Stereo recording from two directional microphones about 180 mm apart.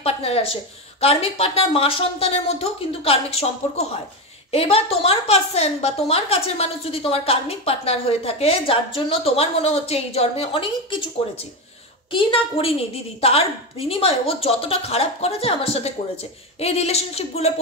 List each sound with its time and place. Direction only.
0.0 s a woman's voice: 35° left (ahead or behind)
12.1 s a woman's voice: 30° left (ahead or behind)